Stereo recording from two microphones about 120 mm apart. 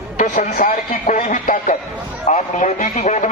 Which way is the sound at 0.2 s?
90° left.